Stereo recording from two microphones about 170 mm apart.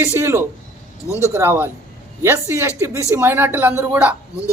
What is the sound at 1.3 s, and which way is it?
Speech, 15° right (ahead or behind).